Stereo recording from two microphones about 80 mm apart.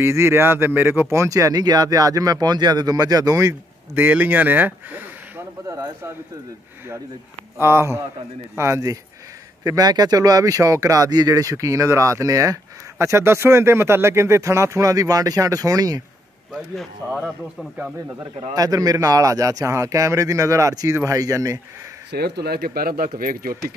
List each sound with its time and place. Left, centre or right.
0.0 s speech: right
3.9 s speech: right
5.7 s speech: right
7.5 s speech: right
9.6 s speech: right
13.0 s speech: right
16.5 s a man's voice: centre
18.5 s speech: right